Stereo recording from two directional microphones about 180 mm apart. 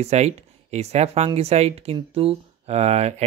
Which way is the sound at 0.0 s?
35° right (ahead or behind).